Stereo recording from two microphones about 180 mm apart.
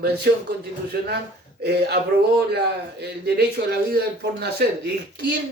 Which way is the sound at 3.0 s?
65° right (ahead or behind).